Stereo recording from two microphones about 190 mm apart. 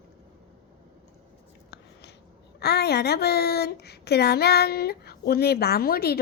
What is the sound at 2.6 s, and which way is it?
A woman's voice, 60° left (ahead or behind).